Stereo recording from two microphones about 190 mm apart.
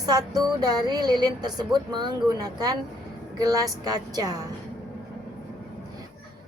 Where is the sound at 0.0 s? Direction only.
20° right (ahead or behind).